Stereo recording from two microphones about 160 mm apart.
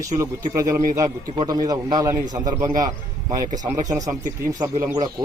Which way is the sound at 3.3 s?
50° right (ahead or behind).